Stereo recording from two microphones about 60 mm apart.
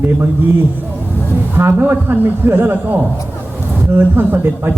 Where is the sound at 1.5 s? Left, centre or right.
Right.